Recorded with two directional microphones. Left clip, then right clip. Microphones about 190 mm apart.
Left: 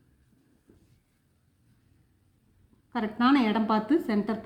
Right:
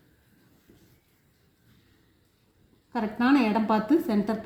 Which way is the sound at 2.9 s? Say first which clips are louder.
Even; 10° right (ahead or behind).